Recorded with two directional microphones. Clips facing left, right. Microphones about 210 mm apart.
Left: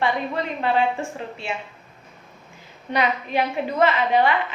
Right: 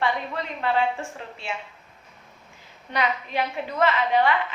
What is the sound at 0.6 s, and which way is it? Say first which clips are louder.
Speech: left 2 dB; 20° left (ahead or behind).